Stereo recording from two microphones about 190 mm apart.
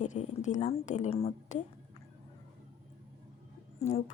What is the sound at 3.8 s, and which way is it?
Speech, 35° left (ahead or behind).